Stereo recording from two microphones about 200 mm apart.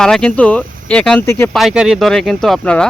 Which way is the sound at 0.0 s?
5° left (ahead or behind).